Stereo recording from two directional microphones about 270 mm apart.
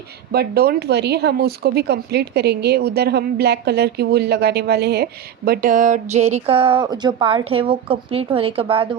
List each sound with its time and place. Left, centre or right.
0.3 s speech: right; by 8.9 s centre